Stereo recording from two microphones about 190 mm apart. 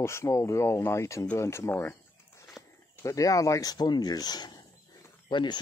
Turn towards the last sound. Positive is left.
turn(degrees=25)  # may be behind; listen again after turning